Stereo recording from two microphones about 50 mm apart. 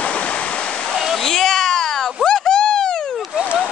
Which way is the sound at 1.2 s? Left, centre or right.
Centre.